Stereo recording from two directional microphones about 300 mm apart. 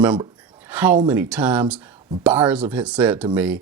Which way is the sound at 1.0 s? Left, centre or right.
Centre.